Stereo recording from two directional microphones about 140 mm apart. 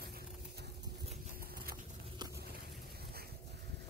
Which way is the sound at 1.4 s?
90° right.